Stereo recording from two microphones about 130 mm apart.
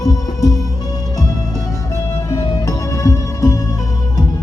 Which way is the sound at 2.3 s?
25° left (ahead or behind).